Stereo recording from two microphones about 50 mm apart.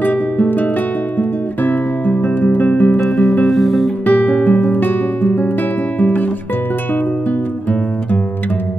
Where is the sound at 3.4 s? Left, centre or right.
Centre.